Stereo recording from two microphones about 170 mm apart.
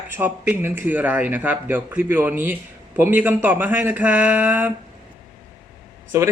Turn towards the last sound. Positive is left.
turn(degrees=-15)  # may be behind; listen again after turning